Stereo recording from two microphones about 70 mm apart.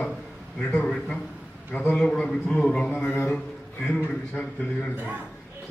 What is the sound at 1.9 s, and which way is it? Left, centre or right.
Speech, centre.